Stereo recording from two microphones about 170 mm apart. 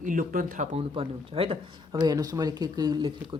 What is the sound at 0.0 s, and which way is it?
Speech, 50° right (ahead or behind).